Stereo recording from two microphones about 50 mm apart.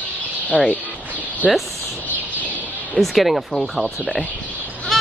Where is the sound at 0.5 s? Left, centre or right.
Left.